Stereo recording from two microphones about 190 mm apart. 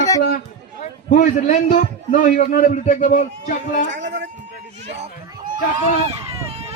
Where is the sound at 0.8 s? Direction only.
40° left (ahead or behind).